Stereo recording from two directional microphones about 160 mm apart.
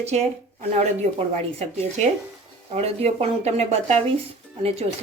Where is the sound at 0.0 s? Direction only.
45° right (ahead or behind).